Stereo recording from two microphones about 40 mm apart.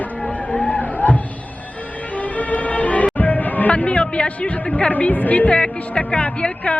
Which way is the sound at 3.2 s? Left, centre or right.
Left.